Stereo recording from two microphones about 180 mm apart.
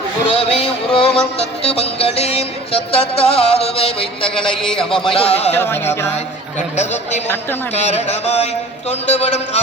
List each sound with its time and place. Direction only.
0.3 s music: 35° left (ahead or behind)
4.4 s a man's voice: 5° left (ahead or behind)
5.0 s music: 30° left (ahead or behind)
5.5 s music: 10° left (ahead or behind)
6.7 s music: 40° left (ahead or behind)